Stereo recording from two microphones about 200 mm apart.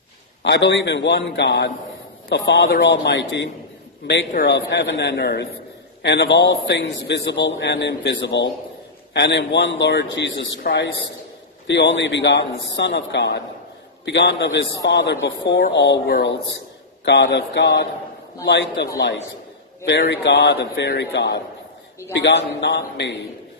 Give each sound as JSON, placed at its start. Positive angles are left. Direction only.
{"t": 0.4, "sound": "a man's voice", "side_deg": 60}